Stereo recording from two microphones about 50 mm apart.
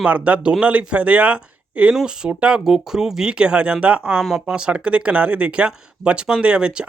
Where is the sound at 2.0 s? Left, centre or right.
Centre.